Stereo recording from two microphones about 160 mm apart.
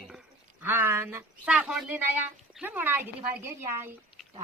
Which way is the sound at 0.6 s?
15° right (ahead or behind).